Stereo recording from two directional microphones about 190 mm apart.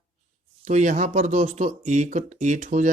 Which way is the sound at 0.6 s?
40° right (ahead or behind).